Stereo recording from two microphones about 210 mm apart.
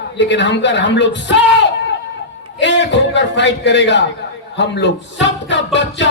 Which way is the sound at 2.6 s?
55° left (ahead or behind).